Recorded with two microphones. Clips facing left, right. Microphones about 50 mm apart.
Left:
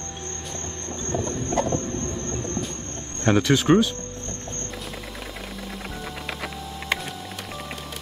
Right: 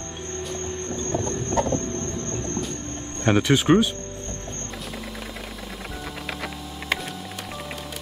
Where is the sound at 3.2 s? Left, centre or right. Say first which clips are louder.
Even; right.